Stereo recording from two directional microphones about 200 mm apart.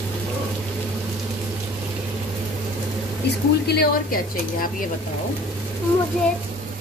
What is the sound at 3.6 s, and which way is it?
Speech, 50° left (ahead or behind).